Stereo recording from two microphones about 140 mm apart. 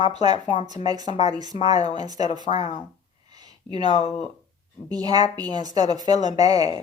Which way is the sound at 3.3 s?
30° right (ahead or behind).